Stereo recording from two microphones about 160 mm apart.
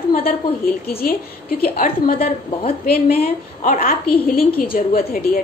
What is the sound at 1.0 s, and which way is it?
A woman's voice, 65° left (ahead or behind).